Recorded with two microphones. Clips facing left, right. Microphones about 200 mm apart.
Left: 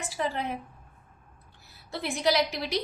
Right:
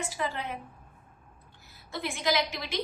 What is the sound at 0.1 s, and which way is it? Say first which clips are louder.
Speech: left 3 dB; 35° left (ahead or behind).